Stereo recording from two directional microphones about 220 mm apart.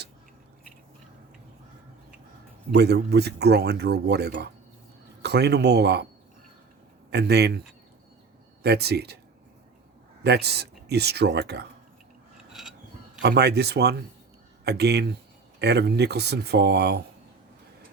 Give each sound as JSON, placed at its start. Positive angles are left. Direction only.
{"t": 2.7, "sound": "speech", "side_deg": -50}
{"t": 7.1, "sound": "speech", "side_deg": -50}
{"t": 8.6, "sound": "speech", "side_deg": -45}
{"t": 10.2, "sound": "speech", "side_deg": -50}
{"t": 13.2, "sound": "speech", "side_deg": -50}